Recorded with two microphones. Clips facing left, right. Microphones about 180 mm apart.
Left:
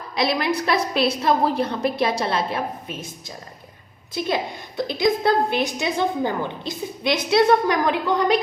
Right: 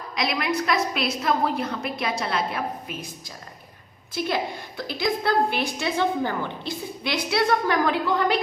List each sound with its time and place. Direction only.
0.2 s a woman's voice: 30° left (ahead or behind)
4.9 s a woman's voice: 20° left (ahead or behind)